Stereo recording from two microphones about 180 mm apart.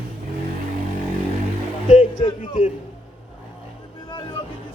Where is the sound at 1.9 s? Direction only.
35° left (ahead or behind).